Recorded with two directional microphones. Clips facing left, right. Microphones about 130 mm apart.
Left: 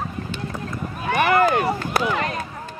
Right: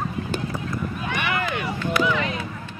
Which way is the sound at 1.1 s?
40° left (ahead or behind).